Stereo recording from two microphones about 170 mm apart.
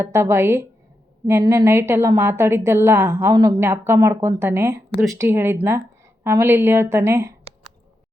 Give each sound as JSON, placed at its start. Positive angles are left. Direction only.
{"t": 0.0, "sound": "a woman's voice", "side_deg": -15}